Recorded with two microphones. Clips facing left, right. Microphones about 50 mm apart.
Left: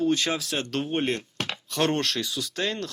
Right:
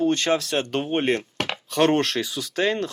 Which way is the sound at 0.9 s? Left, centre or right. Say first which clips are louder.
Right 4 dB; right.